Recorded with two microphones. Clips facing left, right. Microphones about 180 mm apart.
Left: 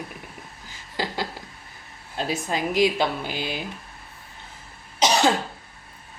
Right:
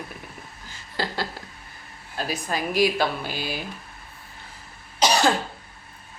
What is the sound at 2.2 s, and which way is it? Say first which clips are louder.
Speech: left 2 dB; 25° left (ahead or behind).